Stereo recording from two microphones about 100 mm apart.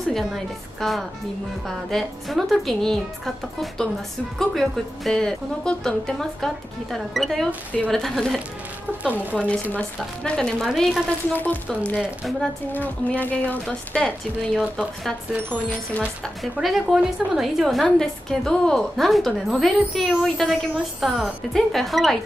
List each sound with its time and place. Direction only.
0.1 s a woman's voice: centre (ahead or behind)
9.0 s speech: 15° right (ahead or behind)
9.4 s a woman's voice: 10° left (ahead or behind)
12.0 s a woman's voice: centre (ahead or behind)
12.7 s a woman's voice: 15° left (ahead or behind)
16.5 s a woman's voice: 5° right (ahead or behind)